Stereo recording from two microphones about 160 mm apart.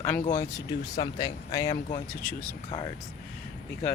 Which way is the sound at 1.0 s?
25° left (ahead or behind).